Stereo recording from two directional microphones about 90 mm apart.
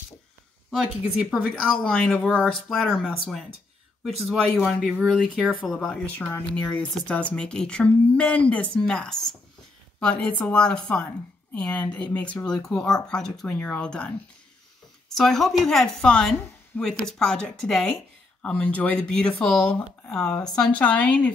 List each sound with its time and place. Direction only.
0.7 s speech: 5° right (ahead or behind)
1.5 s a woman's voice: 15° left (ahead or behind)